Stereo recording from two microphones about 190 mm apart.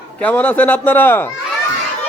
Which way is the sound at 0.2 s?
10° left (ahead or behind).